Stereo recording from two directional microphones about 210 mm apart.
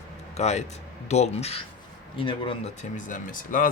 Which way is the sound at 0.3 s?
30° left (ahead or behind).